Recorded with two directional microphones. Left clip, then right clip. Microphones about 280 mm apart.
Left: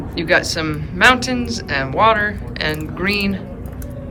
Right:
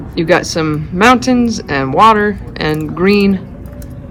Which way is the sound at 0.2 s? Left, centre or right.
Centre.